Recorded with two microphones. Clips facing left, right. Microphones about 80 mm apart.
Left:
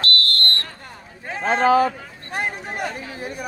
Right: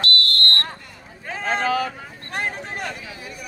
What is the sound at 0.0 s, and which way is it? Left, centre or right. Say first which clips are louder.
Fire alarm: even; left.